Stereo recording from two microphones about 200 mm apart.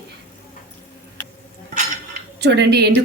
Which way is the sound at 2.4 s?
55° right (ahead or behind).